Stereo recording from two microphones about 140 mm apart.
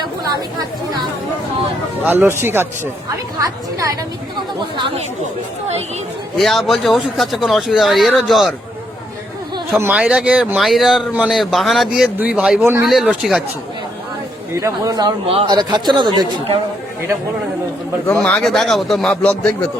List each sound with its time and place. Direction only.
2.0 s speech: 15° right (ahead or behind)
6.3 s speech: centre (ahead or behind)
9.7 s speech: 15° right (ahead or behind)
12.9 s speech: centre (ahead or behind)
14.5 s speech: 25° right (ahead or behind)
15.3 s a man's voice: 35° right (ahead or behind)
18.0 s speech: 10° left (ahead or behind)